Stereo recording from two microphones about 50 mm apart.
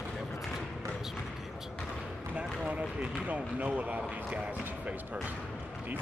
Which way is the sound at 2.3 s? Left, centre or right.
Right.